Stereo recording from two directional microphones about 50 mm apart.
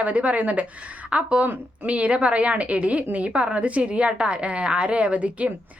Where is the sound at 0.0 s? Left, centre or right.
Right.